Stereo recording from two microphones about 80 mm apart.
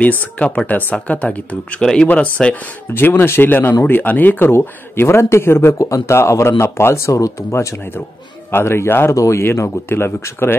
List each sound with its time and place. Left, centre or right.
0.0 s speech: left
2.9 s speech: left
5.8 s speech: left
9.1 s speech: left